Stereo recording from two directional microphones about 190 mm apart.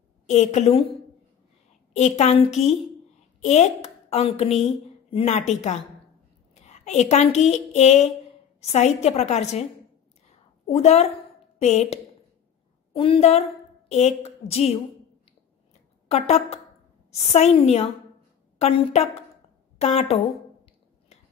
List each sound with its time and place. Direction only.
0.3 s a woman's voice: 35° left (ahead or behind)
2.0 s a woman's voice: 35° left (ahead or behind)
10.2 s a sound: 35° left (ahead or behind)
12.9 s a woman's voice: 30° left (ahead or behind)
16.1 s a woman's voice: 35° left (ahead or behind)